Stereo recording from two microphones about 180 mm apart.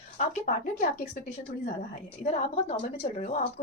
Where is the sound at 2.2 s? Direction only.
35° left (ahead or behind).